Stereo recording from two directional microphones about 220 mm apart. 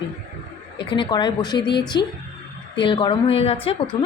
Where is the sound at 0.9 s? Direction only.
20° left (ahead or behind).